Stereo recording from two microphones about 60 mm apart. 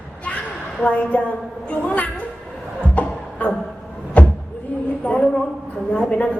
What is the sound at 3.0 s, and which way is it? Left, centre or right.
Music, left.